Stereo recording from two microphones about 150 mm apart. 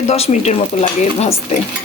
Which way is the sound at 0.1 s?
50° left (ahead or behind).